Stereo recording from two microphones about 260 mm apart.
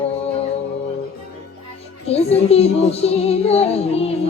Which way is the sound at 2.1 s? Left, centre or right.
Left.